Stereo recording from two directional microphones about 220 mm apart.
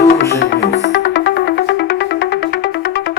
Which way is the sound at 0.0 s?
45° left (ahead or behind).